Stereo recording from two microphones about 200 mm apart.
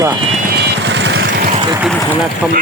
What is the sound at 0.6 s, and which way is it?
Vehicle, 60° right (ahead or behind).